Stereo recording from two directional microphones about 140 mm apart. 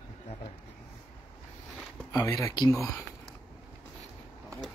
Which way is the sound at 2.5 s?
30° left (ahead or behind).